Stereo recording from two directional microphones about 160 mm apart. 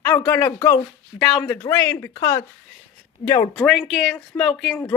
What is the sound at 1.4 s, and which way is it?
Speech, 15° left (ahead or behind).